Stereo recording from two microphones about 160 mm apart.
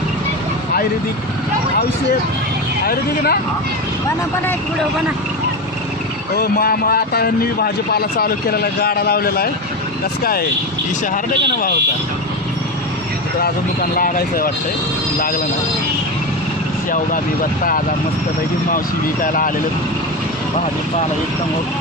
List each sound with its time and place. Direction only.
2.8 s speech: 70° left (ahead or behind)
6.3 s speech: 70° left (ahead or behind)
13.9 s speech: 65° left (ahead or behind)
18.7 s speech: 60° left (ahead or behind)